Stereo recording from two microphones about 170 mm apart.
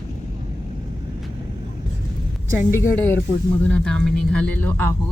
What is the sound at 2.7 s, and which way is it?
Speech, 15° left (ahead or behind).